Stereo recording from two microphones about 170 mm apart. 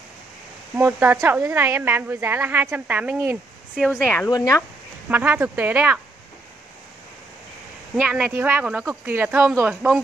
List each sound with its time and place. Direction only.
0.7 s a woman's voice: 10° right (ahead or behind)
4.3 s speech: 20° left (ahead or behind)
5.1 s a woman's voice: 10° right (ahead or behind)
7.9 s a woman's voice: 5° right (ahead or behind)